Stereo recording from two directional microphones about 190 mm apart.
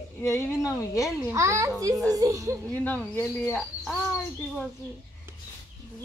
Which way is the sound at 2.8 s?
10° left (ahead or behind).